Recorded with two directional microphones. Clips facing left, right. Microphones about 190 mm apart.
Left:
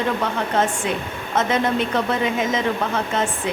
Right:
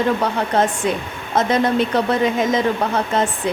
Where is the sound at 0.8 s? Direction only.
40° right (ahead or behind).